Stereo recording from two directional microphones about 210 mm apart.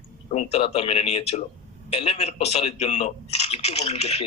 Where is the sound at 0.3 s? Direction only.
30° left (ahead or behind).